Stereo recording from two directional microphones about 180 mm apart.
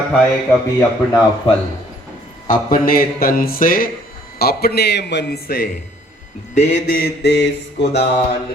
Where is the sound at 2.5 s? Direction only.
50° left (ahead or behind).